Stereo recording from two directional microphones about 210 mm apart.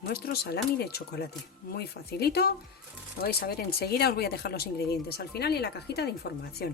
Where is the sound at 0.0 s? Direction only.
50° left (ahead or behind).